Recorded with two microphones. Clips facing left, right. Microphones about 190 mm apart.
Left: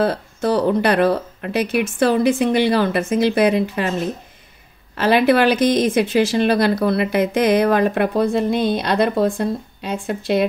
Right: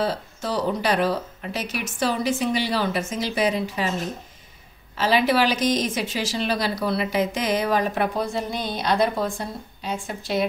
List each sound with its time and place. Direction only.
0.0 s a woman's voice: 60° left (ahead or behind)
4.9 s a woman's voice: 60° left (ahead or behind)